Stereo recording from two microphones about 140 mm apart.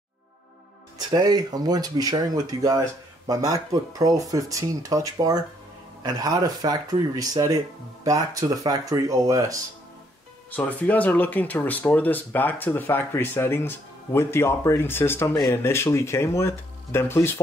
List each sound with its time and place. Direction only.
0.9 s speech: 30° right (ahead or behind)
10.5 s speech: 10° left (ahead or behind)